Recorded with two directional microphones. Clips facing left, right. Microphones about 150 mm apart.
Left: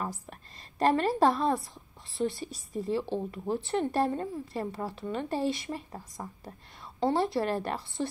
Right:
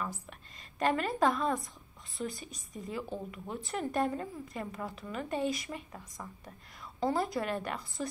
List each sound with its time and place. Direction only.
0.0 s a woman's voice: 40° left (ahead or behind)